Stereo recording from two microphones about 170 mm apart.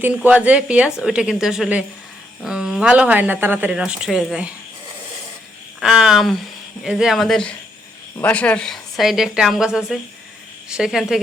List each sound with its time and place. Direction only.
0.0 s speech: 10° right (ahead or behind)
5.8 s speech: 5° right (ahead or behind)